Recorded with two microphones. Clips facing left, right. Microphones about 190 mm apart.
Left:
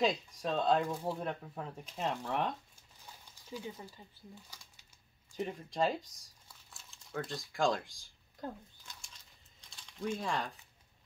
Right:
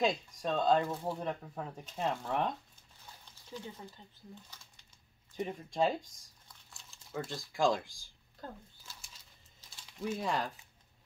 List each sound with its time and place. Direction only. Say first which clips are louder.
0.0 s speech: even; centre (ahead or behind)
3.4 s speech: left 2 dB; 10° left (ahead or behind)
5.3 s speech: right 1 dB; centre (ahead or behind)
8.4 s speech: left 4 dB; 15° left (ahead or behind)
8.8 s a sound: even; 5° right (ahead or behind)